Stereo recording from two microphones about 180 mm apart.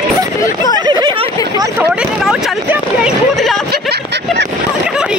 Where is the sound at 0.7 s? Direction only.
25° right (ahead or behind).